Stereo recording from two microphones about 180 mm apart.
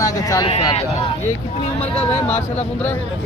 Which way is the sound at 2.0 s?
10° left (ahead or behind).